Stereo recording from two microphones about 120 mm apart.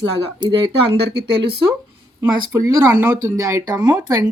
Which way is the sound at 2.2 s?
20° right (ahead or behind).